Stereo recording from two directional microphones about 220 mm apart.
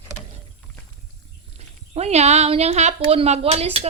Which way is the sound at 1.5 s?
30° right (ahead or behind).